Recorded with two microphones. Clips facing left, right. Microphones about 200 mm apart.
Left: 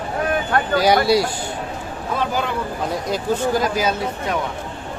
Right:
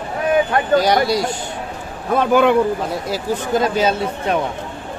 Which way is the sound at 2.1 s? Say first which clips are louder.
Right 10 dB; 60° right (ahead or behind).